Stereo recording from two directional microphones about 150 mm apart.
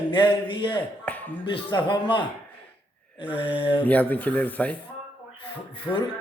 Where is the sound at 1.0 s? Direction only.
10° left (ahead or behind).